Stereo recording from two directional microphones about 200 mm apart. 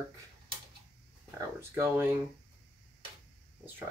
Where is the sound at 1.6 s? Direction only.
10° right (ahead or behind).